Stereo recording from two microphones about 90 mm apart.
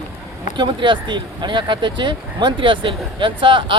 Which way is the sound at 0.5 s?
60° right (ahead or behind).